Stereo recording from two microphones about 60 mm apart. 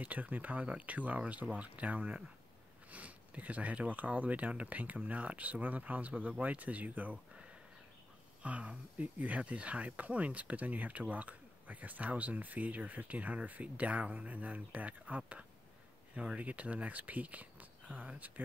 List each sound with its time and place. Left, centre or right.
0.0 s speech: right